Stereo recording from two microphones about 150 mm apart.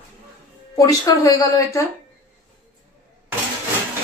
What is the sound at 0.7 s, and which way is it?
Speech, 25° left (ahead or behind).